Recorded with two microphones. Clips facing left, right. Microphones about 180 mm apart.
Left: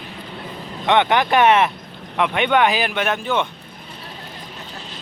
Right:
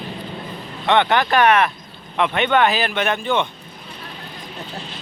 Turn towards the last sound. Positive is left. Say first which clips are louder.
# right 1 dB
turn(degrees=5)  # may be behind; listen again after turning